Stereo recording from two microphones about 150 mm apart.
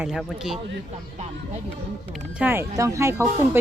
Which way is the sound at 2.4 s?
15° right (ahead or behind).